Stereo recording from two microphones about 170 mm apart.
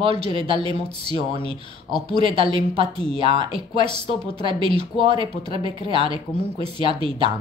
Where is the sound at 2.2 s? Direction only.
35° right (ahead or behind).